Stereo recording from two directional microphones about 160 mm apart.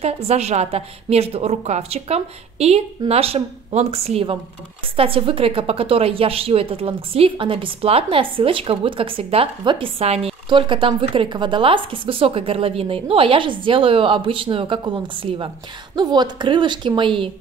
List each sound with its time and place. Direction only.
0.0 s a woman's voice: 40° right (ahead or behind)
16.0 s a woman's voice: 25° right (ahead or behind)